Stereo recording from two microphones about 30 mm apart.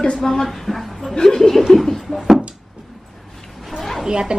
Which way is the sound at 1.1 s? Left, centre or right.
Left.